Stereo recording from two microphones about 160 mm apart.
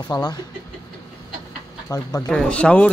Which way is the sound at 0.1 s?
25° left (ahead or behind).